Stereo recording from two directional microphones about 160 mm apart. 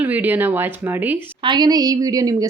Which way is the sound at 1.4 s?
25° right (ahead or behind).